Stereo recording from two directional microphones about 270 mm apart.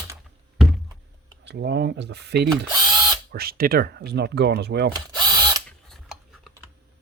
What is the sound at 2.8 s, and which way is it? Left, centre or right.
Ratchet, centre.